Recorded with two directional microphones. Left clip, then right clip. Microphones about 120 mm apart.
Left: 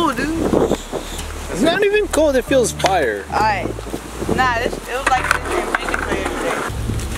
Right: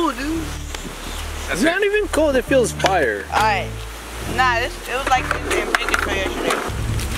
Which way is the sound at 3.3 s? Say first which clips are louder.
Even; 5° right (ahead or behind).